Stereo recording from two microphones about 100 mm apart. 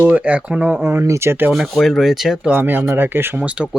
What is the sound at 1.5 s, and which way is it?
Speech, centre (ahead or behind).